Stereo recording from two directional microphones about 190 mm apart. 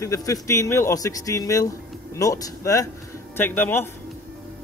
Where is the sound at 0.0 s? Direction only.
15° left (ahead or behind).